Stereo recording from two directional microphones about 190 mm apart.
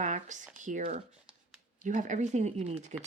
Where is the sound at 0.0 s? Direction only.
40° right (ahead or behind).